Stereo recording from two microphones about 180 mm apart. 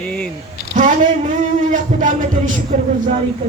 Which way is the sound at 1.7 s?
45° right (ahead or behind).